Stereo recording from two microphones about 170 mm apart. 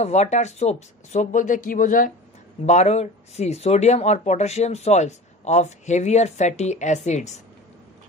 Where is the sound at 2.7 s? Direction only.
40° left (ahead or behind).